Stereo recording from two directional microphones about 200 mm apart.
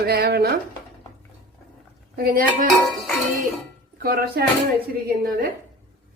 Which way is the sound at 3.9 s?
50° right (ahead or behind).